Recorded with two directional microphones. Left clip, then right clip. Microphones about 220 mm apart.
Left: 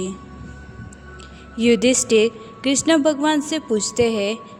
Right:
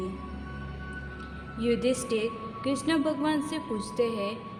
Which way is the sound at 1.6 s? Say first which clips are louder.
Left 10 dB; 35° left (ahead or behind).